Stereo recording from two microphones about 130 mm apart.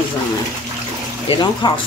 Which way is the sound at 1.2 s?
40° left (ahead or behind).